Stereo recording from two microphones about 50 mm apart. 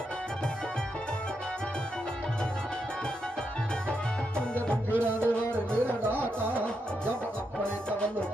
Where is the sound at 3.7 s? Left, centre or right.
Centre.